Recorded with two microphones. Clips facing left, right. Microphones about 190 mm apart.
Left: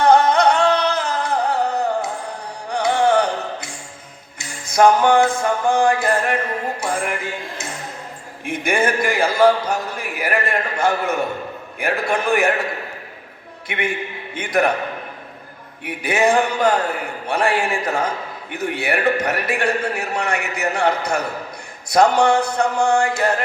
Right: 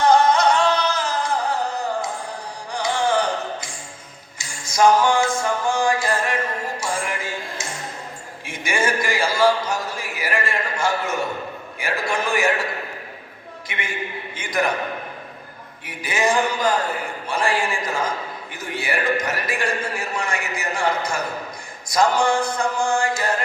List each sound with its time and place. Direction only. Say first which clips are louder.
0.0 s music: left 2 dB; 60° left (ahead or behind)
7.6 s a sound: left 1 dB; 60° left (ahead or behind)
8.4 s a man's voice: left 4 dB; 60° left (ahead or behind)
13.7 s a man's voice: left 6 dB; 60° left (ahead or behind)
15.8 s a man's voice: left 5 dB; 60° left (ahead or behind)